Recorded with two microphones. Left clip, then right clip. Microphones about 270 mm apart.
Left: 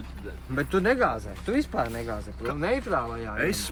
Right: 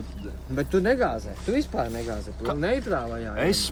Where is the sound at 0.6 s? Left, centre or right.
Left.